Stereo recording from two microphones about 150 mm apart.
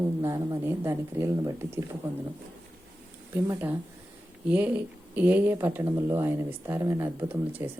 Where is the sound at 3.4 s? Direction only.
15° right (ahead or behind).